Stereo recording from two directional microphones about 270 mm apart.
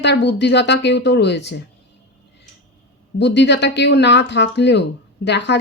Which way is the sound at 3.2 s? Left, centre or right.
Left.